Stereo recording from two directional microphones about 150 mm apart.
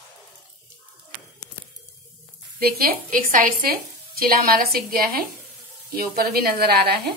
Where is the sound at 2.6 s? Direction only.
75° right (ahead or behind).